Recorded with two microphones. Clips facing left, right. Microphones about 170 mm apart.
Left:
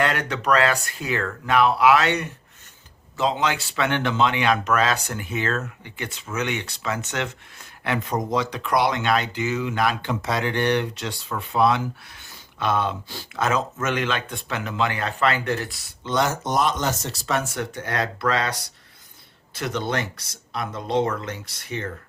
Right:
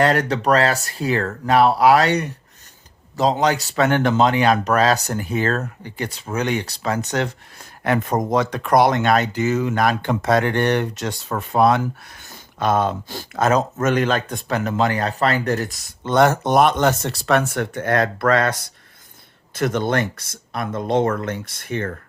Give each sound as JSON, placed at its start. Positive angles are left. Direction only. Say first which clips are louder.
{"t": 0.0, "sound": "speech", "louder": "right 6 dB", "side_deg": -40}